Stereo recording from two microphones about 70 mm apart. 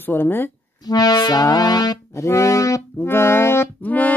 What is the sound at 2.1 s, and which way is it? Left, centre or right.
Speech, left.